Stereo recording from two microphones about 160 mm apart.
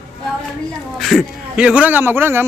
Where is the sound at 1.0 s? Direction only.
Centre (ahead or behind).